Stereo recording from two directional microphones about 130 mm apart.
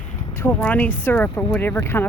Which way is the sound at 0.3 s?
15° left (ahead or behind).